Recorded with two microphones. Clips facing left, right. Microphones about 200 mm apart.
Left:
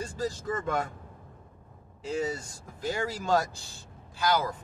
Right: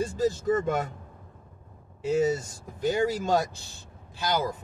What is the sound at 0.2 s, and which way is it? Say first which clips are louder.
Speech: right 7 dB; 20° right (ahead or behind).